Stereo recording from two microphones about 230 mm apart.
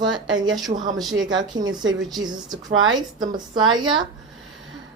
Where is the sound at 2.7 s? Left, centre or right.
Right.